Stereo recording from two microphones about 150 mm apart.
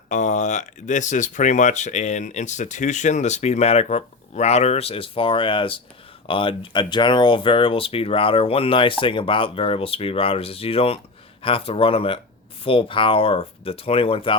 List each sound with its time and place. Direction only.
0.1 s speech: 50° left (ahead or behind)